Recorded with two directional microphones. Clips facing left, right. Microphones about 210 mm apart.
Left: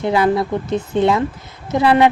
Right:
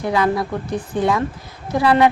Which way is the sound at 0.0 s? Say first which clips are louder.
Left 3 dB; 25° left (ahead or behind).